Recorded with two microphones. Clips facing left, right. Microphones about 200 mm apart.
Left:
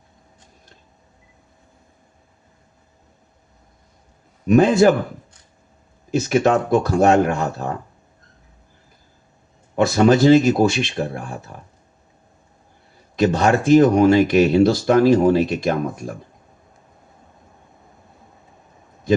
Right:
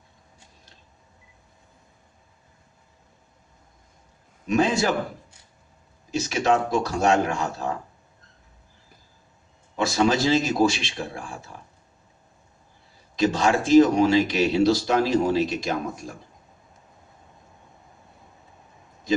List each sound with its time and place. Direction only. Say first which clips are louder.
4.4 s speech: left 9 dB; 55° left (ahead or behind)
6.1 s speech: left 5 dB; 55° left (ahead or behind)
9.7 s speech: left 7 dB; 55° left (ahead or behind)
13.1 s speech: left 4 dB; 55° left (ahead or behind)